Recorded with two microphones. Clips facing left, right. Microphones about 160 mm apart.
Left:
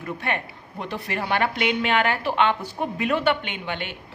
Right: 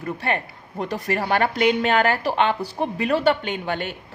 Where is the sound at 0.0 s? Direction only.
35° right (ahead or behind).